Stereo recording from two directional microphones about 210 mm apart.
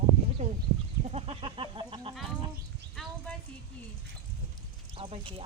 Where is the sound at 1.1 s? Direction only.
25° right (ahead or behind).